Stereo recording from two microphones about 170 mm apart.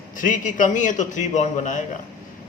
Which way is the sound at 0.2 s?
50° left (ahead or behind).